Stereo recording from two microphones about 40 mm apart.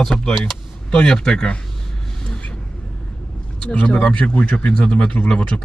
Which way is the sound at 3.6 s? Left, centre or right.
Left.